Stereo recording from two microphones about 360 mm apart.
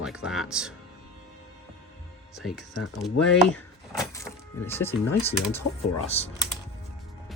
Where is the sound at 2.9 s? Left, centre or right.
Centre.